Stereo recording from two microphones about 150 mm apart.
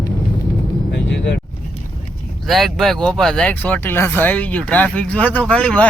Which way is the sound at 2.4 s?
Centre (ahead or behind).